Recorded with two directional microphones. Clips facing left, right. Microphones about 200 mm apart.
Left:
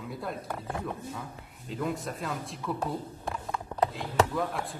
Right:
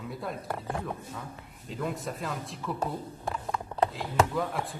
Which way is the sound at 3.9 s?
Centre (ahead or behind).